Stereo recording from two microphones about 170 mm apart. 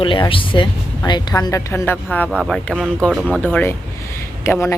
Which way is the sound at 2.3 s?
Centre (ahead or behind).